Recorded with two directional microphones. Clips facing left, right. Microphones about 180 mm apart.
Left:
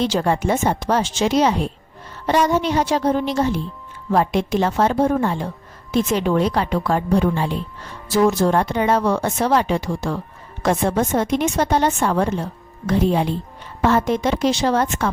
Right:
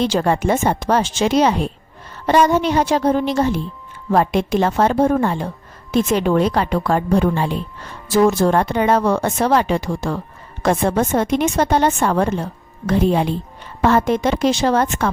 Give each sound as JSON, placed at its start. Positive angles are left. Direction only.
{"t": 0.0, "sound": "a woman's voice", "side_deg": -55}